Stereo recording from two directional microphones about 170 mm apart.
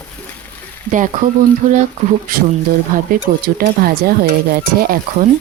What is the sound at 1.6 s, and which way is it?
Speech, 50° right (ahead or behind).